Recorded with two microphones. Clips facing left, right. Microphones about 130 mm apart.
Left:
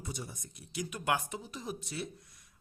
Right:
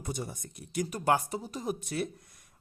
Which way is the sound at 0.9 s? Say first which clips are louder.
Right 5 dB; 40° right (ahead or behind).